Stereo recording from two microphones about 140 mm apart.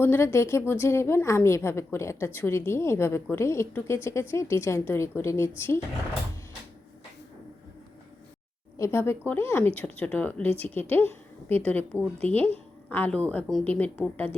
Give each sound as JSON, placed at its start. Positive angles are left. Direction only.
{"t": 0.0, "sound": "a woman's voice", "side_deg": 15}
{"t": 8.8, "sound": "a woman's voice", "side_deg": 20}